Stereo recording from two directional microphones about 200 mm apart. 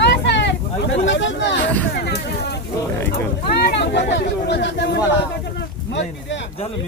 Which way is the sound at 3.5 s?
55° left (ahead or behind).